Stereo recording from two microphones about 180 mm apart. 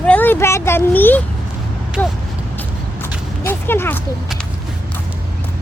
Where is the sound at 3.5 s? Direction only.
10° left (ahead or behind).